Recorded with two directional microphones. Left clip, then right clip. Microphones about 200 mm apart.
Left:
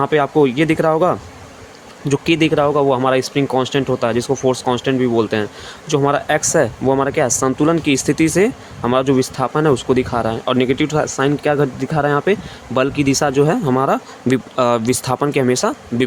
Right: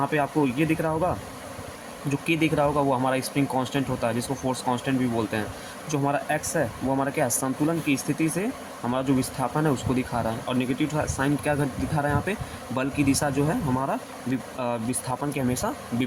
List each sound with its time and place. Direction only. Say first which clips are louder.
0.0 s speech: left 10 dB; 50° left (ahead or behind)